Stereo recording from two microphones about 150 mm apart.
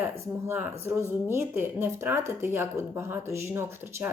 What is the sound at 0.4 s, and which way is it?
Speech, 10° right (ahead or behind).